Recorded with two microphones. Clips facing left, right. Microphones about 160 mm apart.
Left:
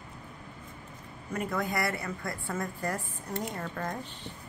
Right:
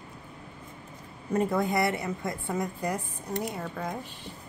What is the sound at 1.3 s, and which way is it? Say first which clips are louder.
A woman's voice: right 6 dB; 30° right (ahead or behind).